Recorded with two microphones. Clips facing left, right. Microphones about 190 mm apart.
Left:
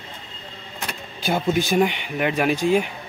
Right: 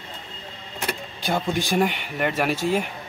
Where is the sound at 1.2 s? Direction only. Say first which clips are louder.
Left 4 dB; 5° left (ahead or behind).